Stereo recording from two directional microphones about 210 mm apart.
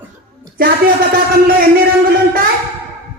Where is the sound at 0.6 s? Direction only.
45° right (ahead or behind).